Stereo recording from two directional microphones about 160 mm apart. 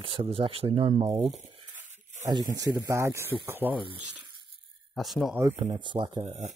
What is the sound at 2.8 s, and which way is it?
Speech, 20° right (ahead or behind).